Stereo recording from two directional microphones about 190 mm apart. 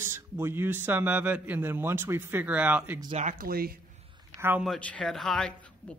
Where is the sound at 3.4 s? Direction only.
50° right (ahead or behind).